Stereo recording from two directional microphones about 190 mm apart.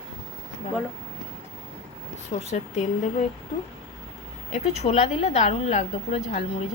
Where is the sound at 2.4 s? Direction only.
35° left (ahead or behind).